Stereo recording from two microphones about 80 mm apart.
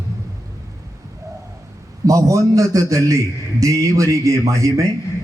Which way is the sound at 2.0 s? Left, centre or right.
Right.